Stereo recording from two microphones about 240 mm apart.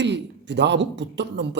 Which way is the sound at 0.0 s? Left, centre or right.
Right.